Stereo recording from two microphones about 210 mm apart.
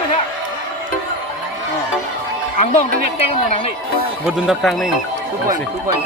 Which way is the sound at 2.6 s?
30° left (ahead or behind).